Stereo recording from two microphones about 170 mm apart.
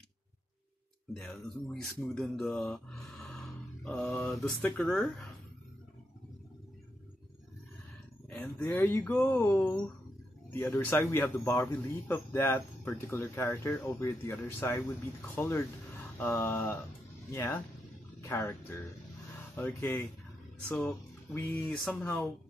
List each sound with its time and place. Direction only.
1.1 s speech: 5° left (ahead or behind)
8.3 s speech: 5° left (ahead or behind)